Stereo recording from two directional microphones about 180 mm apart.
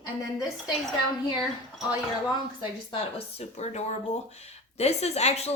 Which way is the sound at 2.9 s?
35° left (ahead or behind).